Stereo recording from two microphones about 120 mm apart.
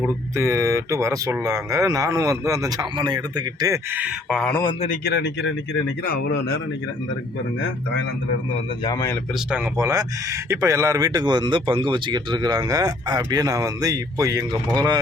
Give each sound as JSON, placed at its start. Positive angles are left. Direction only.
{"t": 0.3, "sound": "speech", "side_deg": -25}
{"t": 3.9, "sound": "speech", "side_deg": -10}
{"t": 9.7, "sound": "speech", "side_deg": -30}